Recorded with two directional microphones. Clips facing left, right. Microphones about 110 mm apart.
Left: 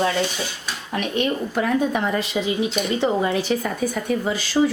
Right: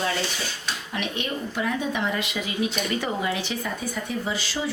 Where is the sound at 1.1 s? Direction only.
45° left (ahead or behind).